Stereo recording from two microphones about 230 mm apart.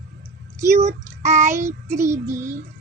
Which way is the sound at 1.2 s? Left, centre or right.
Right.